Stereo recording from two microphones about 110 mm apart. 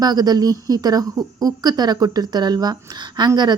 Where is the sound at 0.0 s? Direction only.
35° right (ahead or behind).